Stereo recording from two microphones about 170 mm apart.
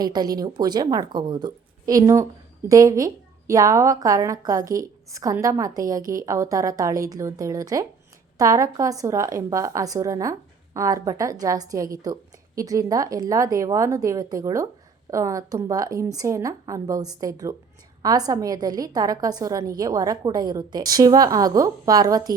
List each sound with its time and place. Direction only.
0.0 s a woman's voice: 25° right (ahead or behind)